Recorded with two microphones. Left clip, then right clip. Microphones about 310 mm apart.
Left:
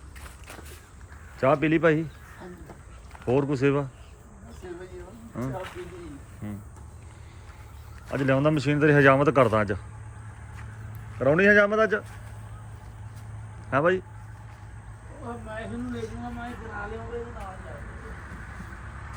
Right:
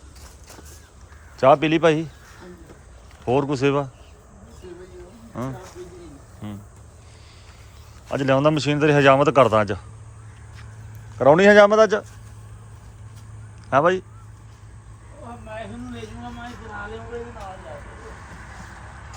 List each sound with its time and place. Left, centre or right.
1.4 s speech: centre
3.2 s speech: centre
6.4 s speech: centre
8.1 s speech: centre
11.2 s speech: centre
13.7 s speech: centre
17.4 s vehicle: right